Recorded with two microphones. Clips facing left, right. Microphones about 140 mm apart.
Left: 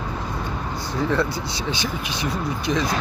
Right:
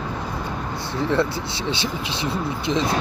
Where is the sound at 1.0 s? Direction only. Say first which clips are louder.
Right 1 dB; 25° right (ahead or behind).